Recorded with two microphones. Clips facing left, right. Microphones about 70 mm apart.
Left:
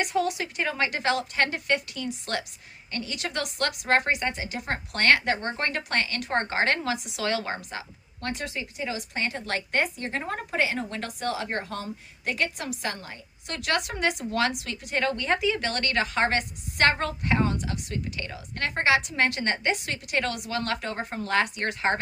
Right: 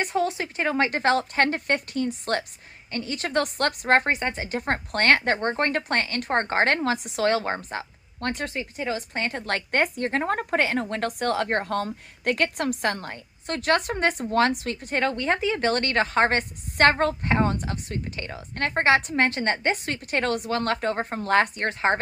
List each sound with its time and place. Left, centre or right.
0.0 s a woman's voice: right